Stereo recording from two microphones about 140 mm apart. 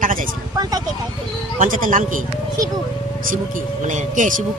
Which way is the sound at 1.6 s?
70° right (ahead or behind).